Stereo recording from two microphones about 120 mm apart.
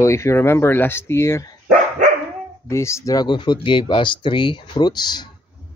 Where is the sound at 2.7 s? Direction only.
25° left (ahead or behind).